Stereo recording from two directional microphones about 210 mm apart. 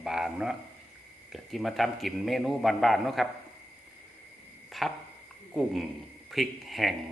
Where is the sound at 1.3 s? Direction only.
Centre (ahead or behind).